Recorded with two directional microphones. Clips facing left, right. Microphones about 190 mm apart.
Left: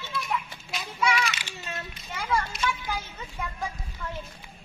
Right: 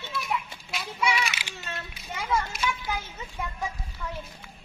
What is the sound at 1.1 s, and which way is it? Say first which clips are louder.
Children playing: left 1 dB; 5° right (ahead or behind).